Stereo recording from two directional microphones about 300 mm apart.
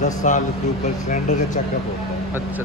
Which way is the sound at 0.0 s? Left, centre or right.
Left.